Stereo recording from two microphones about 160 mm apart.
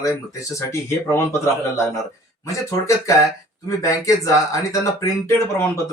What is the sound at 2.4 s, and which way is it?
Speech, 20° left (ahead or behind).